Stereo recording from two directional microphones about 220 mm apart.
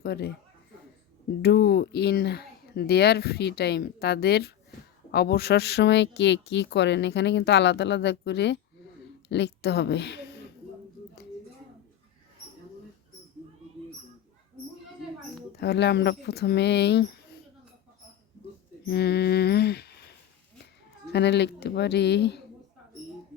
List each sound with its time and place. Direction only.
0.0 s speech: 45° left (ahead or behind)
1.4 s a woman's voice: 45° left (ahead or behind)
15.5 s speech: 50° left (ahead or behind)
18.9 s speech: 45° left (ahead or behind)
21.1 s speech: 50° left (ahead or behind)